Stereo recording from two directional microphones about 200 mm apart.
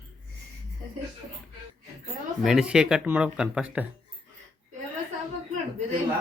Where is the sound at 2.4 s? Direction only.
Centre (ahead or behind).